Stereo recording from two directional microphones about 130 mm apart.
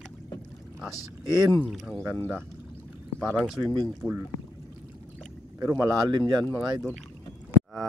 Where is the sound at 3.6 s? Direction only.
35° right (ahead or behind).